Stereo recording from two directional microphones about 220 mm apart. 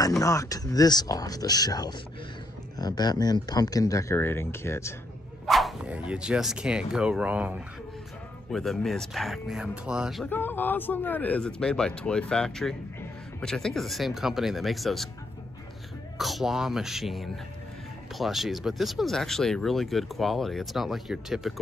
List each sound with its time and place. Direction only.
0.2 s speech: 15° left (ahead or behind)
5.5 s speech: centre (ahead or behind)
16.2 s speech: centre (ahead or behind)